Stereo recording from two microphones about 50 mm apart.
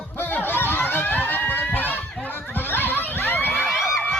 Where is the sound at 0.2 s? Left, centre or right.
Left.